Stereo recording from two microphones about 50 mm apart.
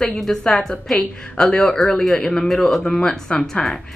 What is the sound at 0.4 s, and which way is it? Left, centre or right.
A woman's voice, centre.